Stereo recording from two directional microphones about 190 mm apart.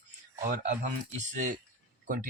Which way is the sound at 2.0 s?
45° right (ahead or behind).